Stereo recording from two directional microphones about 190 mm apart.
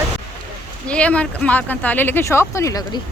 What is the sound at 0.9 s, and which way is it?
Speech, 5° left (ahead or behind).